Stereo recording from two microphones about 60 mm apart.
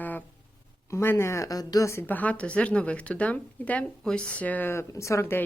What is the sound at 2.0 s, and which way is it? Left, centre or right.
A woman's voice, left.